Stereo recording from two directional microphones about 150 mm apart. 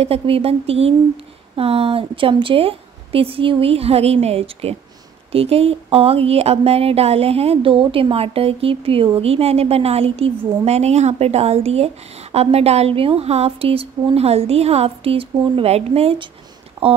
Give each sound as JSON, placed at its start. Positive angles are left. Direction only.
{"t": 0.0, "sound": "a woman's voice", "side_deg": -40}
{"t": 16.8, "sound": "speech", "side_deg": -30}